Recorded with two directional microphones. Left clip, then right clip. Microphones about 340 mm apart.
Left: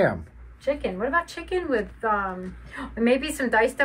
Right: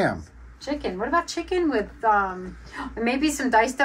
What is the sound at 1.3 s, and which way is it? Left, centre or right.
A woman's voice, centre.